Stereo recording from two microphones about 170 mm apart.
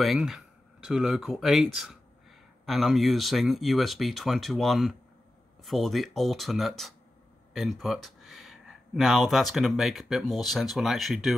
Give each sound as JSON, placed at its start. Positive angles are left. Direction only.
{"t": 0.0, "sound": "speech", "side_deg": 0}